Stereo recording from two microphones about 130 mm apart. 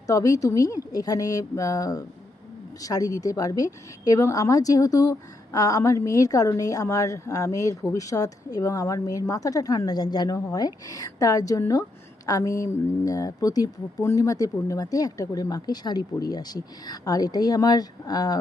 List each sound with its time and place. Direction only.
0.1 s speech: 25° left (ahead or behind)